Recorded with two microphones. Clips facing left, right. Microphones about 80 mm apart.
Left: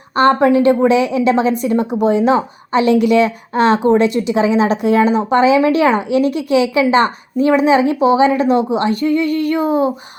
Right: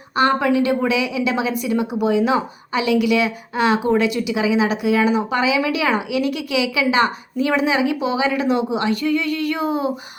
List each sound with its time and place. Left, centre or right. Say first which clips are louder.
0.3 s a woman's voice: left 6 dB; left
1.6 s a woman's voice: left 5 dB; left
2.0 s a woman's voice: left 4 dB; left